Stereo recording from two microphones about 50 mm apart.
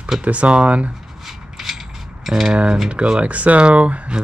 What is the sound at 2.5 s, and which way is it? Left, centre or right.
Cutlery, centre.